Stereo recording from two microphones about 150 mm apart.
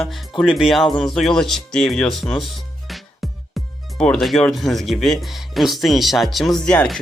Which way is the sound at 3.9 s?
5° left (ahead or behind).